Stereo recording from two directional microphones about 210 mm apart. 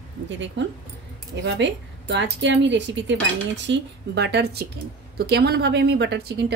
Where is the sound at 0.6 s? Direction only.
60° right (ahead or behind).